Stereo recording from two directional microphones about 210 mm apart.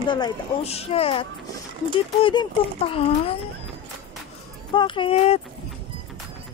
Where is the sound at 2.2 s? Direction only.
25° left (ahead or behind).